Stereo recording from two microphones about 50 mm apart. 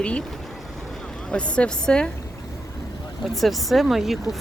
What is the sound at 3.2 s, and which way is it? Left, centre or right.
Speech, centre.